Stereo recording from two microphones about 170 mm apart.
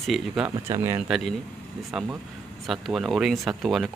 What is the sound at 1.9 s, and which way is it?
Speech, centre (ahead or behind).